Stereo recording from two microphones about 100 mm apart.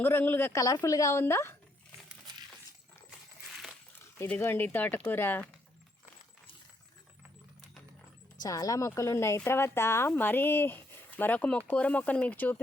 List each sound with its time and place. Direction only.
0.0 s speech: 20° left (ahead or behind)
0.6 s speech: 35° left (ahead or behind)
3.4 s dog: centre (ahead or behind)
4.4 s speech: 20° left (ahead or behind)
8.4 s speech: 35° left (ahead or behind); by 12.5 s 15° left (ahead or behind)